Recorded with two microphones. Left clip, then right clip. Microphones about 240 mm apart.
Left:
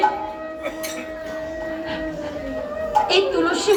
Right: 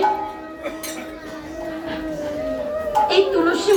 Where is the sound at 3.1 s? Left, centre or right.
Left.